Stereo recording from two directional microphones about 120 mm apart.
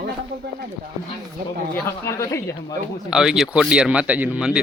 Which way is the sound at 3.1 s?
5° right (ahead or behind).